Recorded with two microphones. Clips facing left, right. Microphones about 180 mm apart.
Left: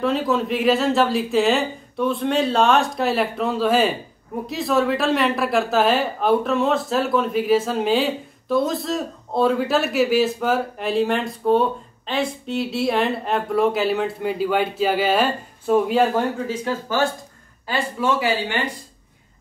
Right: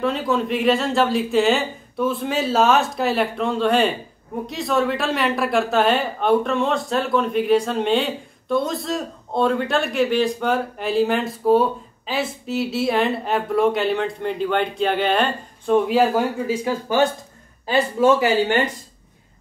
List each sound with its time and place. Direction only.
0.0 s speech: centre (ahead or behind); by 17.1 s 15° right (ahead or behind)
17.7 s speech: 45° right (ahead or behind)